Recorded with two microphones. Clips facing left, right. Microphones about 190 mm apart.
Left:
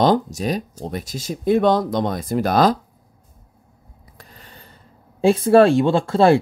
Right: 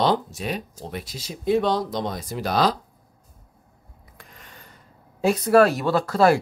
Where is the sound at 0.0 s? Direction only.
45° left (ahead or behind).